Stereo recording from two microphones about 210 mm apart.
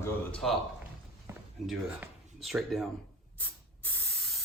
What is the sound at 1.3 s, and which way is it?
Walk, 10° right (ahead or behind).